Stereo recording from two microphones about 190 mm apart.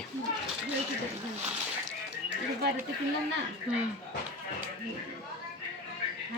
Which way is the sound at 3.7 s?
5° right (ahead or behind).